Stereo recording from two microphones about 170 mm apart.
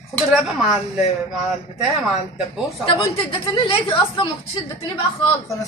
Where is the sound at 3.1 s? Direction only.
35° left (ahead or behind).